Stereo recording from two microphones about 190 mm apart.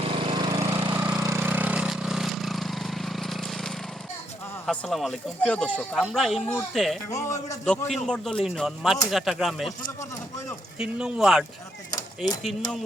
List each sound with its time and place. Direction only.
0.0 s lawn mower: 30° right (ahead or behind); by 3.8 s centre (ahead or behind)
4.6 s speech: 5° left (ahead or behind)
7.1 s a man's voice: 15° left (ahead or behind)
8.0 s speech: 5° left (ahead or behind)
10.8 s speech: 5° right (ahead or behind)
11.9 s a sound: 20° left (ahead or behind)